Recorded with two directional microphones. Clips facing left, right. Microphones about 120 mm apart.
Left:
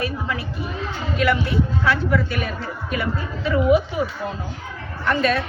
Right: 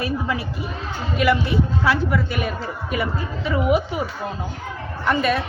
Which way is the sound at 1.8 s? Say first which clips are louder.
Even; 10° right (ahead or behind).